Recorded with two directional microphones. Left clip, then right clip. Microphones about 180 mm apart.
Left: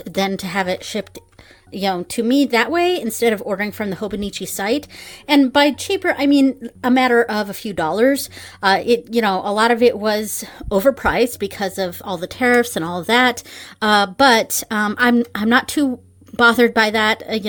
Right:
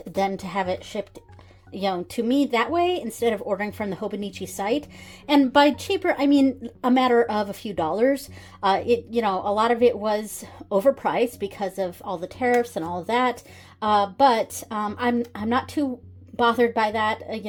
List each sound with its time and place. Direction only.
0.1 s a woman's voice: 30° left (ahead or behind)